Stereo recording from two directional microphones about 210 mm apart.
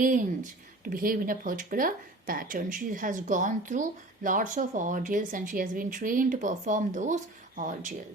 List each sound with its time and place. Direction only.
0.9 s speech: 40° right (ahead or behind)